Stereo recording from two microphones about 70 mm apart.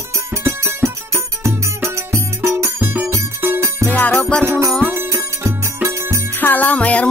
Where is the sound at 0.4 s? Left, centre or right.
Right.